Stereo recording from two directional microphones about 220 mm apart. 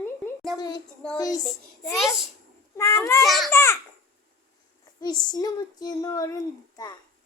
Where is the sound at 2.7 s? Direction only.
15° left (ahead or behind).